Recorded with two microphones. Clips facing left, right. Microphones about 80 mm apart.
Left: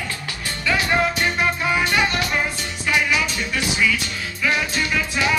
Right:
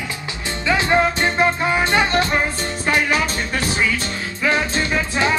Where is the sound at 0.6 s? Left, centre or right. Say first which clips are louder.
Right 3 dB; right.